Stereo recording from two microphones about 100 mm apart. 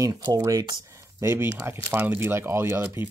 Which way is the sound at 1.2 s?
25° right (ahead or behind).